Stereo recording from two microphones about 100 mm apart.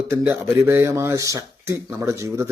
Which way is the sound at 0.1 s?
25° right (ahead or behind).